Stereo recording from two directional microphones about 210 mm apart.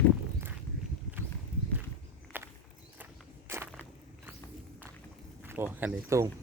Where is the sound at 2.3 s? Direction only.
10° right (ahead or behind).